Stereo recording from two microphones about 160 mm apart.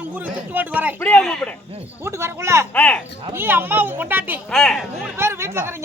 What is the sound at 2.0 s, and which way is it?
Speech, 15° right (ahead or behind).